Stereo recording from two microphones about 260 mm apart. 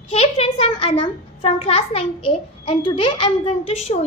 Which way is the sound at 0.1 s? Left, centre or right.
Left.